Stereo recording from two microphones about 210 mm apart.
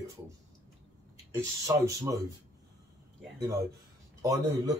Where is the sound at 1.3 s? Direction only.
15° right (ahead or behind).